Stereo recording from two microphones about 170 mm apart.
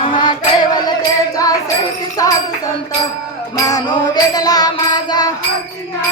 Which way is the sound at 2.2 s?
20° left (ahead or behind).